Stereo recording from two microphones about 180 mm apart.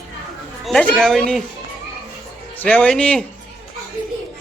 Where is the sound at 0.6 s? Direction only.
5° left (ahead or behind).